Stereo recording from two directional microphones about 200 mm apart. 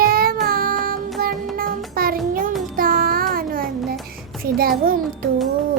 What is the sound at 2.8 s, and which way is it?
Child singing, 45° right (ahead or behind).